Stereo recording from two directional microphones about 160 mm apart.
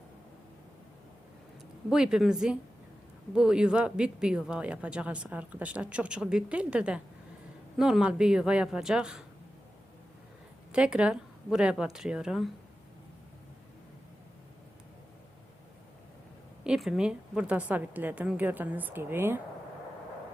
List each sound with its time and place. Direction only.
1.9 s speech: 5° right (ahead or behind)
10.7 s speech: 5° right (ahead or behind)
16.6 s speech: centre (ahead or behind)